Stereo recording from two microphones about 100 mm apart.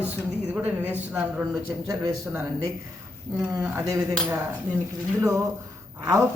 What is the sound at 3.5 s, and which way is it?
Speech, 20° right (ahead or behind).